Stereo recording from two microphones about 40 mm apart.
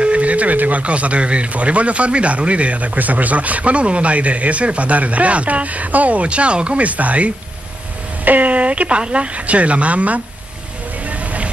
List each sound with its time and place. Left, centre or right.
0.0 s speech: right
11.1 s music: right